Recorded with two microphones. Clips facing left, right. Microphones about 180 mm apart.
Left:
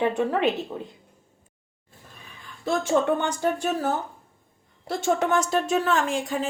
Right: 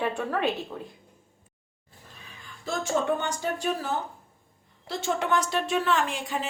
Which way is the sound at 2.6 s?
55° left (ahead or behind).